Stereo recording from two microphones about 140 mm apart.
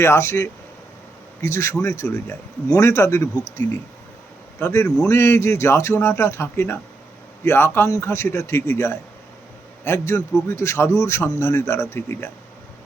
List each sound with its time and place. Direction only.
0.0 s a man's voice: 20° left (ahead or behind)
4.6 s a man's voice: 15° left (ahead or behind)